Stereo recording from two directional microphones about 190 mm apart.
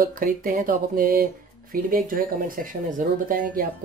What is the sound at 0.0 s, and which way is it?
Speech, 45° right (ahead or behind).